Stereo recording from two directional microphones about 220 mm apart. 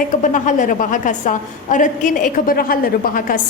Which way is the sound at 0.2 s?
35° left (ahead or behind).